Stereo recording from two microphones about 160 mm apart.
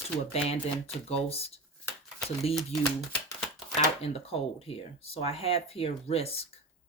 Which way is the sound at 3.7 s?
40° left (ahead or behind).